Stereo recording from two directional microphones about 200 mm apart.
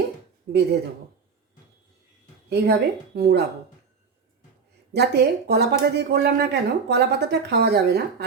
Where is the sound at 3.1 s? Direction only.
55° right (ahead or behind).